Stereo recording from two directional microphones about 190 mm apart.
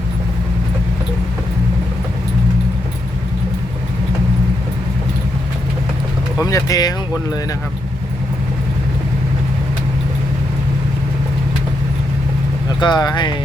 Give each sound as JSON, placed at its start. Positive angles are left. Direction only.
{"t": 6.4, "sound": "speech", "side_deg": 20}
{"t": 12.8, "sound": "speech", "side_deg": 20}